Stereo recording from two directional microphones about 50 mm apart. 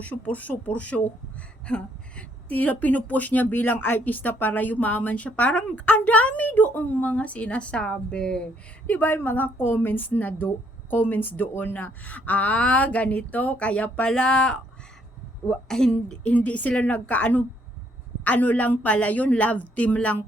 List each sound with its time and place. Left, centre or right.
0.0 s a woman's voice: left
8.9 s a woman's voice: left; by 16.1 s centre
16.2 s a woman's voice: left